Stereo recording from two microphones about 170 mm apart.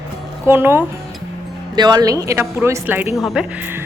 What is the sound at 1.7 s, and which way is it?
Speech, 25° right (ahead or behind).